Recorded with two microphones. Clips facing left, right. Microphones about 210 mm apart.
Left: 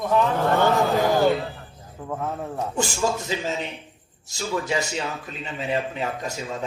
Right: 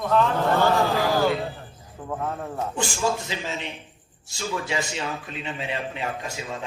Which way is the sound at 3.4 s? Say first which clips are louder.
Left 4 dB; 40° left (ahead or behind).